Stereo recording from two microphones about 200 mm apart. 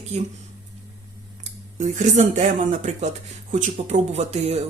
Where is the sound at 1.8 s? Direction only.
35° right (ahead or behind).